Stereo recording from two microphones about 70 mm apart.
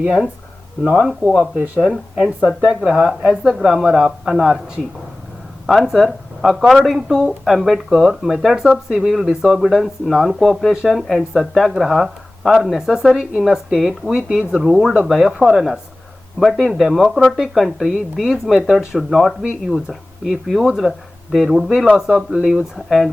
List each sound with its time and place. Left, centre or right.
0.0 s speech: centre
0.9 s speech: centre
1.5 s speech: right
1.8 s speech: centre
5.6 s speech: centre